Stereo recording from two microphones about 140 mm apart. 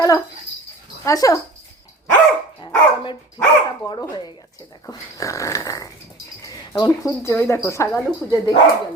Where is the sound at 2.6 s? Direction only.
35° left (ahead or behind).